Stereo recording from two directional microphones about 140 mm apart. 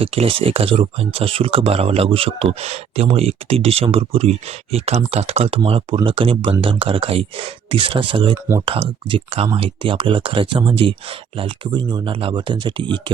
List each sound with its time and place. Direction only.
0.0 s speech: 45° right (ahead or behind)